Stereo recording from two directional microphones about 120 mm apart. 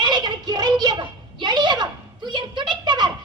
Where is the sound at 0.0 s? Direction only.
35° right (ahead or behind).